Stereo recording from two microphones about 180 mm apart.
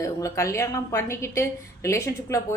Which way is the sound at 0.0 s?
15° left (ahead or behind).